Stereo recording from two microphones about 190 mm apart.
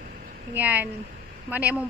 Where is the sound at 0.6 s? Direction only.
10° right (ahead or behind).